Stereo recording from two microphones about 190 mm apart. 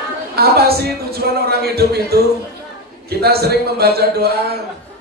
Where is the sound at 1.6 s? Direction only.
55° right (ahead or behind).